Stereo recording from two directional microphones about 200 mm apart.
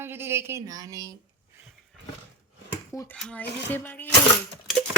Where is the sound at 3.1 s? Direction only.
5° left (ahead or behind).